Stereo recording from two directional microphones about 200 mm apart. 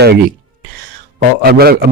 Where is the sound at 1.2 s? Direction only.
50° right (ahead or behind).